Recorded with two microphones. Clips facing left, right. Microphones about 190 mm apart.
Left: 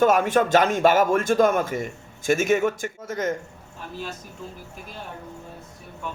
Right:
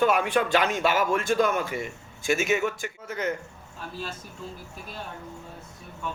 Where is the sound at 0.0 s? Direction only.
45° left (ahead or behind).